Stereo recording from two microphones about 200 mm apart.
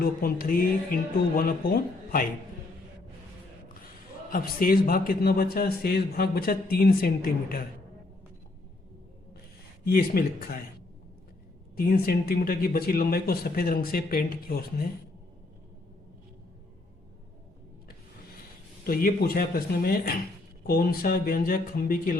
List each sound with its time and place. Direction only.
0.0 s a man's voice: 45° left (ahead or behind)
4.3 s a man's voice: 45° left (ahead or behind)
9.8 s a man's voice: 50° left (ahead or behind)
11.8 s a man's voice: 50° left (ahead or behind)
18.9 s a man's voice: 50° left (ahead or behind)